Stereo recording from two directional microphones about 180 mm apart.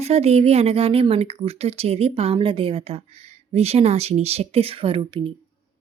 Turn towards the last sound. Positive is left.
turn(degrees=-30)  # may be behind; listen again after turning